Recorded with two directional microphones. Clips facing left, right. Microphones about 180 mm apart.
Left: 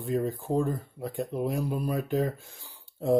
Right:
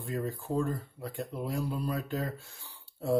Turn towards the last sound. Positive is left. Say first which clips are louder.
# left 5 dB
turn(degrees=20)  # may be behind; listen again after turning